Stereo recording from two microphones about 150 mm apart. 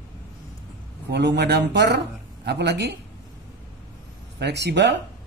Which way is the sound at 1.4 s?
90° right.